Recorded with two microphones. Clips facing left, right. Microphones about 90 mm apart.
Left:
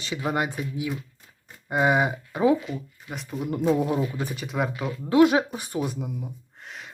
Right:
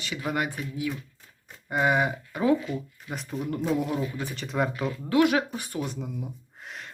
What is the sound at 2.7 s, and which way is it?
Speech, centre (ahead or behind).